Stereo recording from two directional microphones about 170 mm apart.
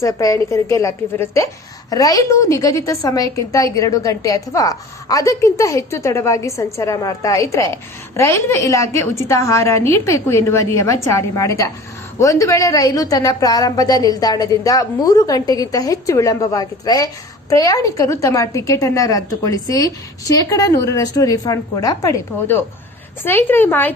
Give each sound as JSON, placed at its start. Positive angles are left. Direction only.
{"t": 0.0, "sound": "a woman's voice", "side_deg": 20}